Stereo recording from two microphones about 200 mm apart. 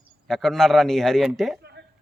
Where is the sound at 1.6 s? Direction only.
55° right (ahead or behind).